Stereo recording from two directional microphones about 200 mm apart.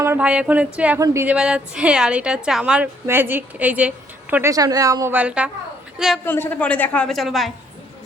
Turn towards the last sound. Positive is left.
turn(degrees=0)  # may be behind; listen again after turning